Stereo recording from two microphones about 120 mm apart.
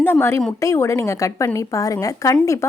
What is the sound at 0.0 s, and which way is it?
A woman's voice, 20° left (ahead or behind).